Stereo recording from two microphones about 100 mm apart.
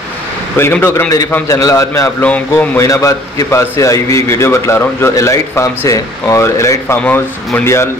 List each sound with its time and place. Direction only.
0.6 s a man's voice: 25° left (ahead or behind)
2.2 s speech: 15° left (ahead or behind)
2.8 s a man's voice: 30° left (ahead or behind)
7.0 s a man's voice: 15° left (ahead or behind)